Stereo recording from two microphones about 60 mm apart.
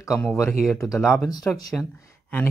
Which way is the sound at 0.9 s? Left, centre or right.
Left.